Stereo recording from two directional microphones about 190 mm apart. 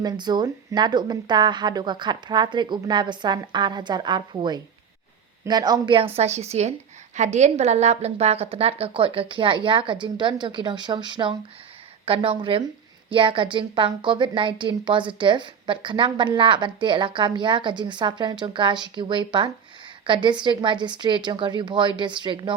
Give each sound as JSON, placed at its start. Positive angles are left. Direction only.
{"t": 0.0, "sound": "a woman's voice", "side_deg": -20}